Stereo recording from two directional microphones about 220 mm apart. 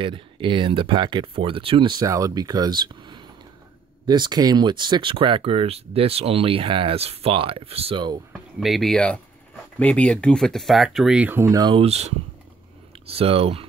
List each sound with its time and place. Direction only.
0.0 s speech: 20° right (ahead or behind)
8.3 s speech: centre (ahead or behind); by 13.7 s 25° right (ahead or behind)